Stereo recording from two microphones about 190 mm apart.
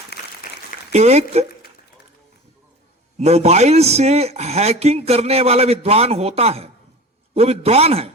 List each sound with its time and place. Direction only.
0.1 s applause: 60° left (ahead or behind)
0.9 s speech: 35° right (ahead or behind)
3.2 s speech: 35° right (ahead or behind)